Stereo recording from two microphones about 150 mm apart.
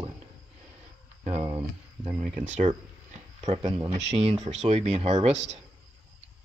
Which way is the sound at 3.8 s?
45° right (ahead or behind).